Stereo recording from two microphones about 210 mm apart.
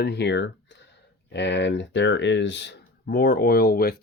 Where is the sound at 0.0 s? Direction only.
55° left (ahead or behind).